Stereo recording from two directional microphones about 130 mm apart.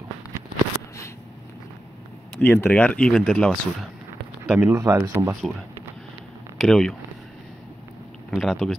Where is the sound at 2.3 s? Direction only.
15° left (ahead or behind).